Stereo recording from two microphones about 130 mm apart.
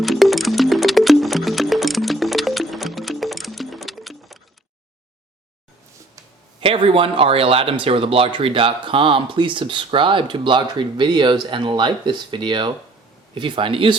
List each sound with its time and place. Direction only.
0.0 s music: centre (ahead or behind)
6.6 s speech: 45° right (ahead or behind)